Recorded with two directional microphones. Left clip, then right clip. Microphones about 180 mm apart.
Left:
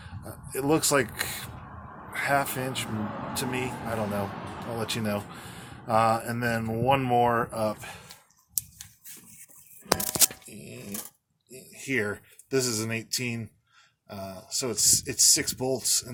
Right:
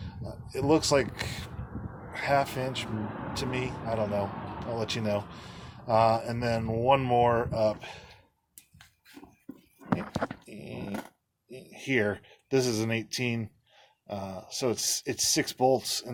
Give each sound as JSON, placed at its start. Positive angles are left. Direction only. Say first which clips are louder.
{"t": 0.0, "sound": "speech", "louder": "even", "side_deg": 0}
{"t": 10.4, "sound": "dog", "louder": "right 2 dB", "side_deg": -30}
{"t": 11.5, "sound": "speech", "louder": "right 1 dB", "side_deg": -35}